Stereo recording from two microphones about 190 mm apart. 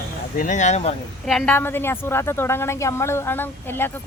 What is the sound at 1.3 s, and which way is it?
Speech, 5° left (ahead or behind).